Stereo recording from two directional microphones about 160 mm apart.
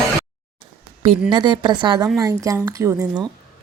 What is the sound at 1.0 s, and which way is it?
A woman's voice, 30° right (ahead or behind).